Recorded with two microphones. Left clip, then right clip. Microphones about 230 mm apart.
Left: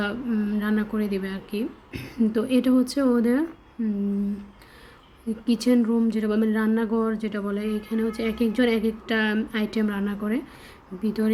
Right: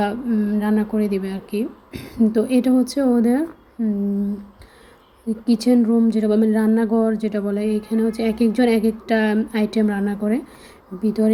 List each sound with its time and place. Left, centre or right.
0.0 s speech: centre
5.5 s speech: centre